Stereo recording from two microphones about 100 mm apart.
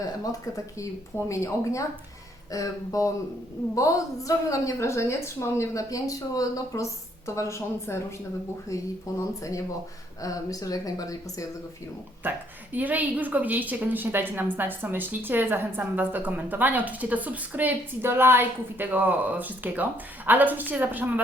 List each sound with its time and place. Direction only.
0.3 s a woman's voice: 35° left (ahead or behind)
12.2 s a woman's voice: 20° right (ahead or behind)